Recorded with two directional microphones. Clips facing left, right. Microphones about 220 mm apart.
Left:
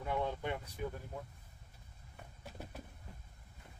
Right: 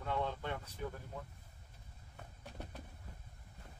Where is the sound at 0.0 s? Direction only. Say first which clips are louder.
Left 2 dB; 15° left (ahead or behind).